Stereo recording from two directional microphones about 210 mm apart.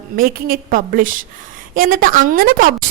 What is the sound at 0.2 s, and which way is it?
A woman's voice, 45° right (ahead or behind).